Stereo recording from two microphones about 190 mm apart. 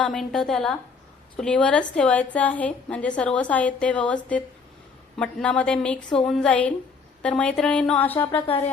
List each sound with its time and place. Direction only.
0.0 s a woman's voice: 5° left (ahead or behind)